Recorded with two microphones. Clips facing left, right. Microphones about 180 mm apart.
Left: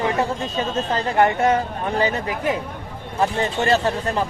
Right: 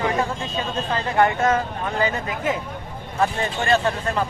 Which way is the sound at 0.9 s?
25° left (ahead or behind).